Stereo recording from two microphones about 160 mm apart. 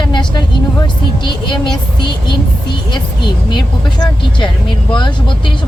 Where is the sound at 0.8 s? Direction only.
30° left (ahead or behind).